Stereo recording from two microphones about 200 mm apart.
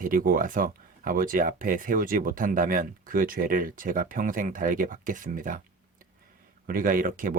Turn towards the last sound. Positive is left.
turn(degrees=-45)  # may be behind; listen again after turning